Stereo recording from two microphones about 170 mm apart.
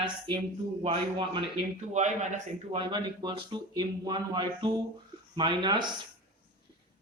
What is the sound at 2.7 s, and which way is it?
Speech, 25° right (ahead or behind).